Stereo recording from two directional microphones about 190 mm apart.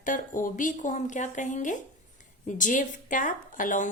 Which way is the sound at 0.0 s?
45° left (ahead or behind).